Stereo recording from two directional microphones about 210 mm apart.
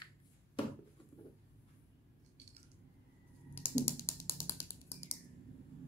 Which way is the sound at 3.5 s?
10° left (ahead or behind).